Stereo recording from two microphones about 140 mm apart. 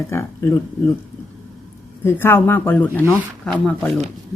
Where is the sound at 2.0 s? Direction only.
15° left (ahead or behind).